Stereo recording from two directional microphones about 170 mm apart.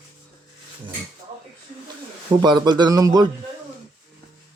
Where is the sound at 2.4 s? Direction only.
25° right (ahead or behind).